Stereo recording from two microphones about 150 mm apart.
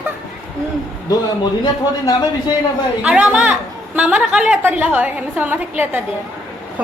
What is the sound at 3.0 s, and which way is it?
A woman's voice, 5° right (ahead or behind).